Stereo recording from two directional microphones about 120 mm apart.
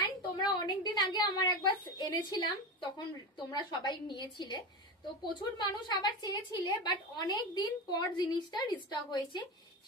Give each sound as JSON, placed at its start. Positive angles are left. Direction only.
{"t": 0.0, "sound": "a woman's voice", "side_deg": 40}